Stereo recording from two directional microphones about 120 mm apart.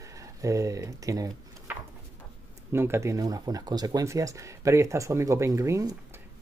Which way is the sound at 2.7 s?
20° right (ahead or behind).